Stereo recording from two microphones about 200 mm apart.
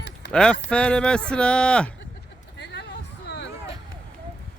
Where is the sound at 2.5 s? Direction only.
60° left (ahead or behind).